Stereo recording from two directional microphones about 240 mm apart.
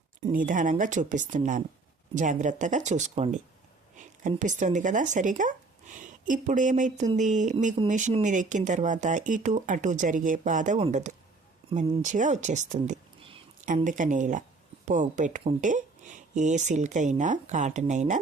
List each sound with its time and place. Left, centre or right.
0.3 s speech: right